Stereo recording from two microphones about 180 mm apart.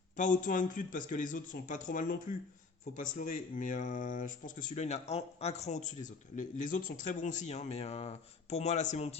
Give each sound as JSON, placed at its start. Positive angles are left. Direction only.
{"t": 0.2, "sound": "speech", "side_deg": 45}